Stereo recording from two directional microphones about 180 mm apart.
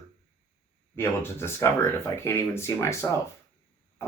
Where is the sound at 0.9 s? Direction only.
15° left (ahead or behind).